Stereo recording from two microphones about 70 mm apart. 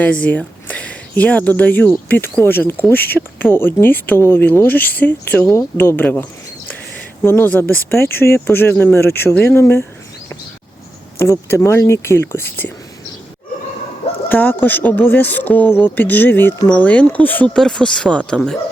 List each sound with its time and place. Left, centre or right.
0.0 s speech: left
7.3 s speech: left
11.2 s speech: left
14.3 s speech: left
17.5 s speech: centre